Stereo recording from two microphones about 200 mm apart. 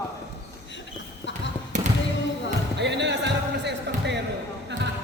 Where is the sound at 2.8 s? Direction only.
60° right (ahead or behind).